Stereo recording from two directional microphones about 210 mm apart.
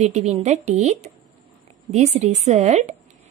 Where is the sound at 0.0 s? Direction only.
30° right (ahead or behind).